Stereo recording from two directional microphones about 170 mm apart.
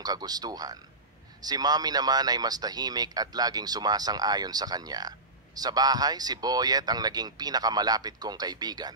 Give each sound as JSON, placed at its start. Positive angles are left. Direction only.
{"t": 0.0, "sound": "speech", "side_deg": -20}